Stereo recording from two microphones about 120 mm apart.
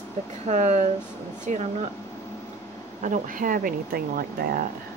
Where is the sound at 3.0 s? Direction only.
90° right.